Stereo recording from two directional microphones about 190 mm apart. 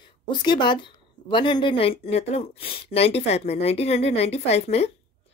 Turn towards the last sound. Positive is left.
turn(degrees=35)  # may be behind; listen again after turning